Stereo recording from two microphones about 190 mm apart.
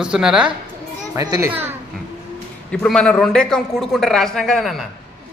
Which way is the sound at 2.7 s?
5° left (ahead or behind).